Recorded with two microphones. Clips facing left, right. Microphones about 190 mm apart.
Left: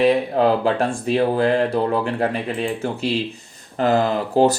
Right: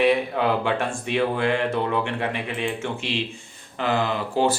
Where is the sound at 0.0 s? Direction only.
35° left (ahead or behind).